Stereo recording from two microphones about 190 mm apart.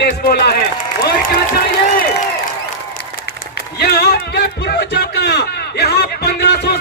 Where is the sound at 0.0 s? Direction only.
60° left (ahead or behind).